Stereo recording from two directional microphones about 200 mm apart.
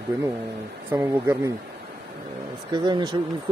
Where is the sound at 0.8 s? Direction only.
10° right (ahead or behind).